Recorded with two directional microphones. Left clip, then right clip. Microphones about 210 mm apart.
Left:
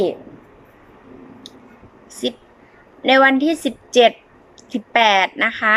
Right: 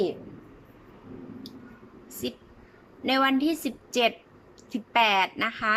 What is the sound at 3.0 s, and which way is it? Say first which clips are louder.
A woman's voice: left 11 dB; 5° right (ahead or behind).